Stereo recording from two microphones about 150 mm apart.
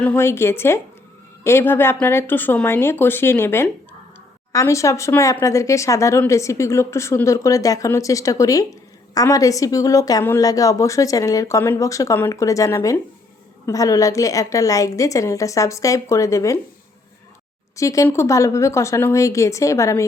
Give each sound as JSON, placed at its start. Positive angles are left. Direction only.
{"t": 0.0, "sound": "speech", "side_deg": 10}
{"t": 17.7, "sound": "speech", "side_deg": 20}